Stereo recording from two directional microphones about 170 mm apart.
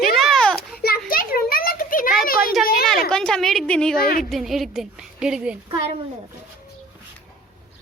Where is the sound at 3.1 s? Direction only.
5° left (ahead or behind).